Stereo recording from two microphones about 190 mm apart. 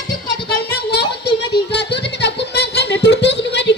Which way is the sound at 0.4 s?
60° left (ahead or behind).